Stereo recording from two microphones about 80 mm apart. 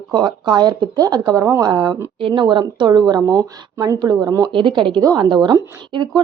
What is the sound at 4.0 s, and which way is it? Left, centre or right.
Speech, right.